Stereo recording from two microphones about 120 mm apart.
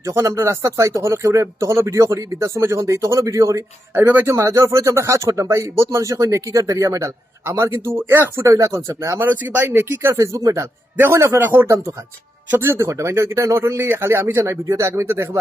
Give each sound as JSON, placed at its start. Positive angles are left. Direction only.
{"t": 0.0, "sound": "speech", "side_deg": -25}
{"t": 4.0, "sound": "speech", "side_deg": -15}